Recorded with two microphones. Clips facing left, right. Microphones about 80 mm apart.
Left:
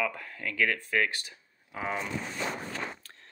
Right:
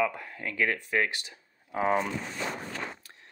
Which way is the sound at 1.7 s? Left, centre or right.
Right.